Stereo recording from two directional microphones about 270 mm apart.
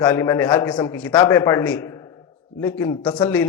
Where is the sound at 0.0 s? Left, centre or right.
Centre.